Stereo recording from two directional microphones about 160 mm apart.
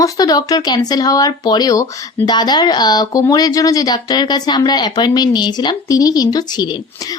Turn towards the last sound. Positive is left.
turn(degrees=25)  # may be behind; listen again after turning